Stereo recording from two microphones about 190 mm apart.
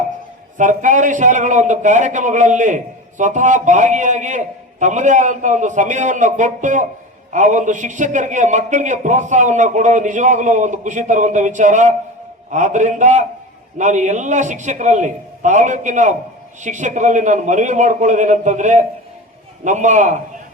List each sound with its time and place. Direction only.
0.5 s a man's voice: 40° right (ahead or behind)